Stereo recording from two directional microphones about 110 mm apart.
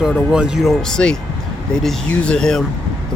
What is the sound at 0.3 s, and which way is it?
Speech, 5° right (ahead or behind).